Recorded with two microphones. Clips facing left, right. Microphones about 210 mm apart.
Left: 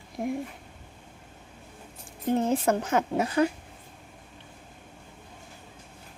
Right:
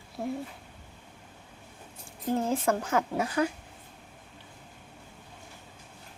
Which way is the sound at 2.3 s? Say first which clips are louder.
Left 3 dB; 20° left (ahead or behind).